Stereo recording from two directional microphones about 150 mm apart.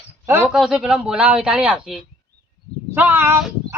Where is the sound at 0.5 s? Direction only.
5° right (ahead or behind).